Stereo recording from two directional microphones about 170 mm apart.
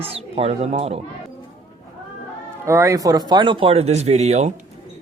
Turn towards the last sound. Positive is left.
turn(degrees=-40)  # may be behind; listen again after turning